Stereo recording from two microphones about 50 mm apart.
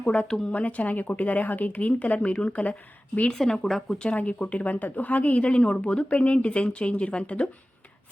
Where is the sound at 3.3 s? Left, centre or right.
Centre.